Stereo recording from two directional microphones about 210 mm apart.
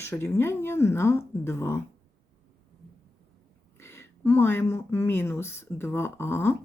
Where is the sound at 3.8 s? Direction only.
10° left (ahead or behind).